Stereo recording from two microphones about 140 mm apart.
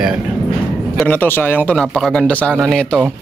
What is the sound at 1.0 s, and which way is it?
A man's voice, 15° left (ahead or behind).